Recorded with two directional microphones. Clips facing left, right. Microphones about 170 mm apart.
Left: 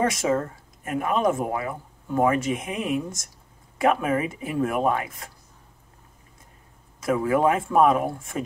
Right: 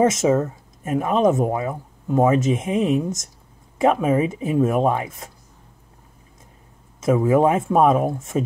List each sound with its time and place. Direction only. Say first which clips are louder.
0.0 s speech: right 6 dB; 20° right (ahead or behind)
7.0 s speech: right 5 dB; 20° right (ahead or behind)